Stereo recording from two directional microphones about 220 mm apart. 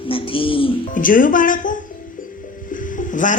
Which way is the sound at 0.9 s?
40° left (ahead or behind).